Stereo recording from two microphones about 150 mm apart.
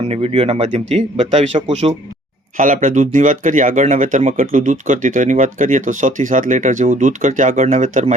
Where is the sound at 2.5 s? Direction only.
60° right (ahead or behind).